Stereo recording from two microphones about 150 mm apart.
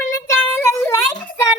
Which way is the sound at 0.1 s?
20° left (ahead or behind).